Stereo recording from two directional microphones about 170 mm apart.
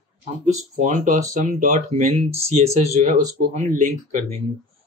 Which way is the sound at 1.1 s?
45° right (ahead or behind).